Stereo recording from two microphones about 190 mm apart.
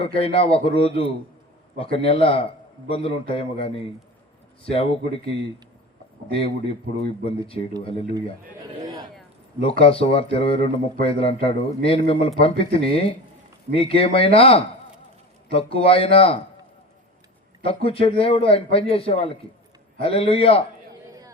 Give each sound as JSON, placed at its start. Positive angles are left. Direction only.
{"t": 0.0, "sound": "a man's voice", "side_deg": 30}
{"t": 9.6, "sound": "a man's voice", "side_deg": 30}
{"t": 17.6, "sound": "a man's voice", "side_deg": 30}